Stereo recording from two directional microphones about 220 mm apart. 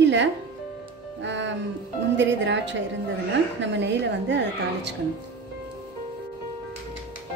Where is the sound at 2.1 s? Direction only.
55° right (ahead or behind).